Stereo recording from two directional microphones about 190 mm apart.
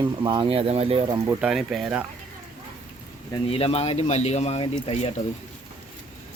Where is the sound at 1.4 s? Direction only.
Centre (ahead or behind).